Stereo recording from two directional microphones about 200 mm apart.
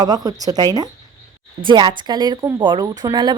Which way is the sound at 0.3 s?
20° right (ahead or behind).